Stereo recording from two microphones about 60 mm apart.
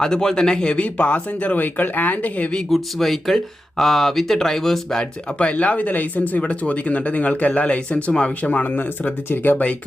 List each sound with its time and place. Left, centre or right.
0.0 s speech: centre
2.6 s speech: centre
5.4 s speech: left
8.6 s speech: left